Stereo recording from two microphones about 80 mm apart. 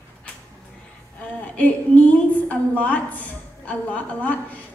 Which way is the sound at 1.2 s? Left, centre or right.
Centre.